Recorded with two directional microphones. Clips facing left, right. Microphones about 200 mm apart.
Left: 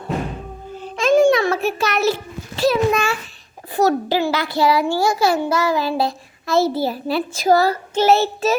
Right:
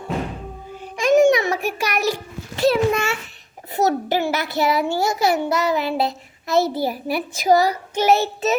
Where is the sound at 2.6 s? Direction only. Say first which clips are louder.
Left 1 dB; 25° right (ahead or behind).